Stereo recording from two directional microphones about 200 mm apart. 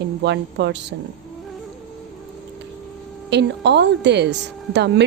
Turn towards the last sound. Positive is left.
turn(degrees=-60)  # may be behind; listen again after turning